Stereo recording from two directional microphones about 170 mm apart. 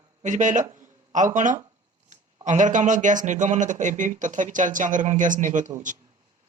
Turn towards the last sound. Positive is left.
turn(degrees=-50)  # may be behind; listen again after turning